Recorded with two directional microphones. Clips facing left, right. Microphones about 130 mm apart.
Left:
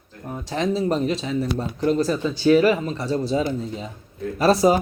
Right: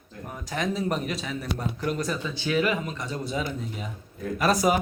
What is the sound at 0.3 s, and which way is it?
Speech, 30° left (ahead or behind).